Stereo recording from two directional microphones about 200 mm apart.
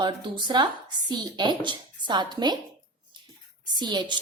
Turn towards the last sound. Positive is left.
turn(degrees=-20)  # may be behind; listen again after turning